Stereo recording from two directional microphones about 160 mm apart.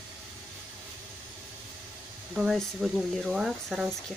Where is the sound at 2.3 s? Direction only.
5° right (ahead or behind).